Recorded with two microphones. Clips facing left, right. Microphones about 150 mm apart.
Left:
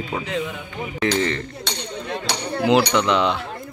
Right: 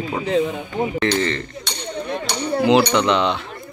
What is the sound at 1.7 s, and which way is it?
Chink, 90° left.